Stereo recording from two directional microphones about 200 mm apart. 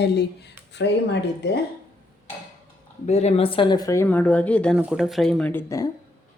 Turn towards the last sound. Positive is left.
turn(degrees=15)  # may be behind; listen again after turning